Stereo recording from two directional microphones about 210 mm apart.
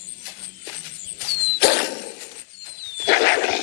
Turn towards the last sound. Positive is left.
turn(degrees=50)  # may be behind; listen again after turning